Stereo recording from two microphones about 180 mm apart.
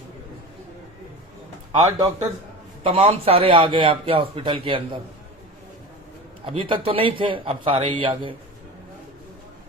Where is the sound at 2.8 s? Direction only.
30° right (ahead or behind).